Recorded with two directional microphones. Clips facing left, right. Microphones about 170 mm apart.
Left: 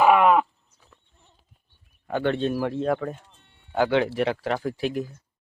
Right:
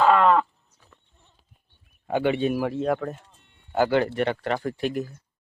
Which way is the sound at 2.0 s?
10° right (ahead or behind).